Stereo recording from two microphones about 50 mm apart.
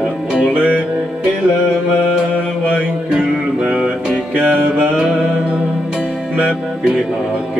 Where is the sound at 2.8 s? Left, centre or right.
Right.